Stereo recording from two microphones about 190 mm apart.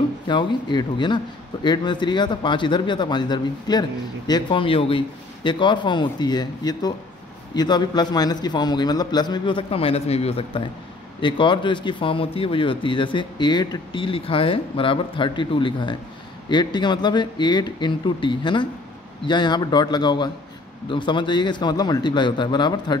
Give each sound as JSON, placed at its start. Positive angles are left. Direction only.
{"t": 0.3, "sound": "speech", "side_deg": 25}